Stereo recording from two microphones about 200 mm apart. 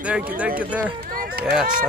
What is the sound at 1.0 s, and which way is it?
Run, 45° right (ahead or behind).